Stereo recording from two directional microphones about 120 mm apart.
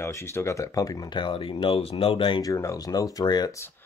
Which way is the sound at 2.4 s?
30° left (ahead or behind).